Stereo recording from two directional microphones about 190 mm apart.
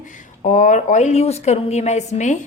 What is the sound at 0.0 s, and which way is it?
A woman's voice, 40° left (ahead or behind).